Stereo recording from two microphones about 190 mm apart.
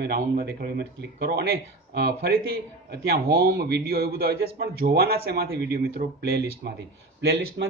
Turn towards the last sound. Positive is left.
turn(degrees=-65)  # may be behind; listen again after turning